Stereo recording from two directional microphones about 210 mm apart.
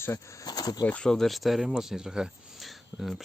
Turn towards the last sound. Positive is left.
turn(degrees=0)  # may be behind; listen again after turning